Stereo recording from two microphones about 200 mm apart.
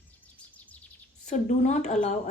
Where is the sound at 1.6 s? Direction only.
35° left (ahead or behind).